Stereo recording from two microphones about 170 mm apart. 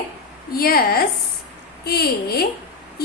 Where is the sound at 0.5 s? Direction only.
60° left (ahead or behind).